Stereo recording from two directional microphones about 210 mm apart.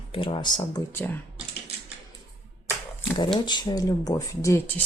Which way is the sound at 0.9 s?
10° left (ahead or behind).